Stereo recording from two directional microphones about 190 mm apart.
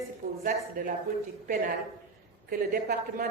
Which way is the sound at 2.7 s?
50° right (ahead or behind).